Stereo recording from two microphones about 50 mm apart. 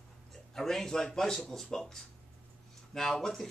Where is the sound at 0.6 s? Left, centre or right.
Centre.